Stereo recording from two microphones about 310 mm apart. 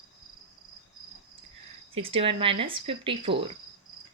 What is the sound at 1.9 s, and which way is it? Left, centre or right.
Speech, centre.